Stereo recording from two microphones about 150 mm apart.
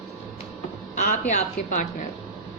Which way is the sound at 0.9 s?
55° left (ahead or behind).